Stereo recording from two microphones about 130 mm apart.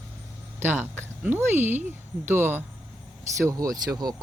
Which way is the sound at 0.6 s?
15° right (ahead or behind).